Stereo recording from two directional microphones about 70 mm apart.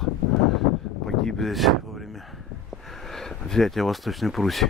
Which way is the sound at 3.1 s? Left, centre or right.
Centre.